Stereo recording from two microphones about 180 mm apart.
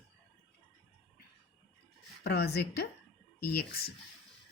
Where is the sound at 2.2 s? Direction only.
65° left (ahead or behind).